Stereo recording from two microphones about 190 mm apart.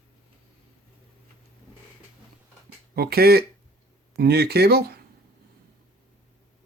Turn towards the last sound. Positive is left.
turn(degrees=-55)  # may be behind; listen again after turning